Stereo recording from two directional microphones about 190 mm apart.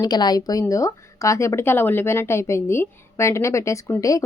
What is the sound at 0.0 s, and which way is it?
A woman's voice, 20° left (ahead or behind).